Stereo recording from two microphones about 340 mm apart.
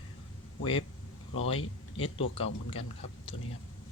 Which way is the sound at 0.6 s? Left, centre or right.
Centre.